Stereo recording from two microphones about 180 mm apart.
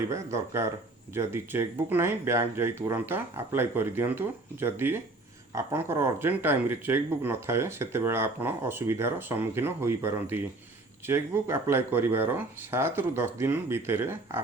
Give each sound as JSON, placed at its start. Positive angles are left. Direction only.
{"t": 0.1, "sound": "speech", "side_deg": -15}